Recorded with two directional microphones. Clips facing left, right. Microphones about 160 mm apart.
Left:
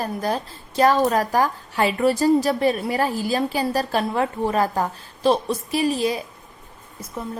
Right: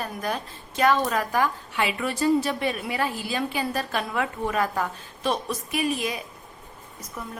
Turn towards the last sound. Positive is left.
turn(degrees=30)  # may be behind; listen again after turning